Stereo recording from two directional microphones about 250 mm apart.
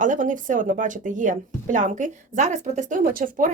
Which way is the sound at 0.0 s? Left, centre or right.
Right.